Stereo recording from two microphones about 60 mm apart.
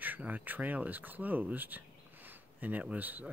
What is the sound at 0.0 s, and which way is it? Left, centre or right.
Speech, right.